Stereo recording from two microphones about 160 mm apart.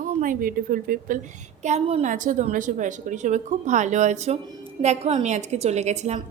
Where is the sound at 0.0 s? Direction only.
55° right (ahead or behind).